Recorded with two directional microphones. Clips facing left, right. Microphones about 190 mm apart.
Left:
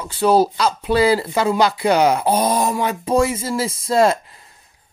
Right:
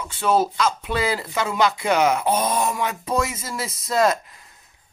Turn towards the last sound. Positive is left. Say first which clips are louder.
# left 4 dB
turn(degrees=30)  # may be behind; listen again after turning